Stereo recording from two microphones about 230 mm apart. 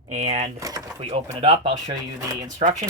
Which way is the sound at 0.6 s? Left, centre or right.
Centre.